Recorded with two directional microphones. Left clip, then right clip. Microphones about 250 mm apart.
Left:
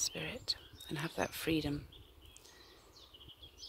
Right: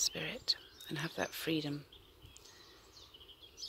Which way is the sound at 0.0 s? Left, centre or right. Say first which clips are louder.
Right 2 dB; centre.